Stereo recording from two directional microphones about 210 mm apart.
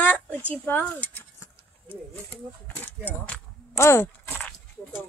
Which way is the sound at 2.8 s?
5° left (ahead or behind).